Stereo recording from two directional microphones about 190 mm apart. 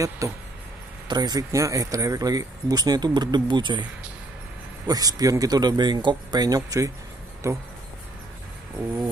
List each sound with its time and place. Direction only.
0.2 s speech: 15° right (ahead or behind)
4.8 s speech: 20° right (ahead or behind)